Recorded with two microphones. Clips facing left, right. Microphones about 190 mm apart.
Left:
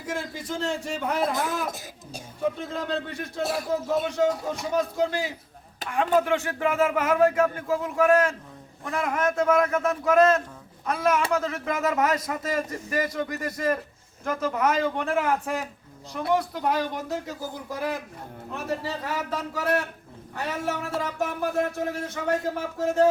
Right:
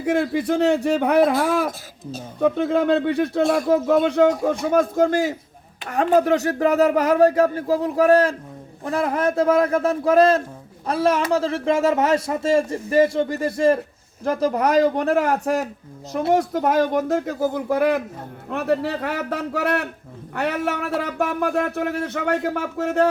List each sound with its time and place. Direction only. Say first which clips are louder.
0.0 s speech: right 12 dB; 65° right (ahead or behind)
2.4 s a man's voice: right 10 dB; 65° right (ahead or behind)